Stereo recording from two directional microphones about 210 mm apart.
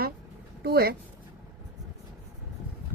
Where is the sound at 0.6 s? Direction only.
50° right (ahead or behind).